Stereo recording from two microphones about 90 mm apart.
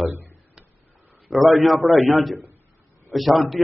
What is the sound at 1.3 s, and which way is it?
A man's voice, centre (ahead or behind).